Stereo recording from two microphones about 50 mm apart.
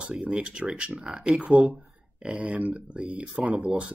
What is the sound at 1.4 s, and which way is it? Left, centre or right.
Speech, right.